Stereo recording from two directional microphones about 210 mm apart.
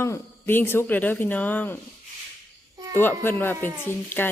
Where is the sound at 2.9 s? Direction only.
10° left (ahead or behind).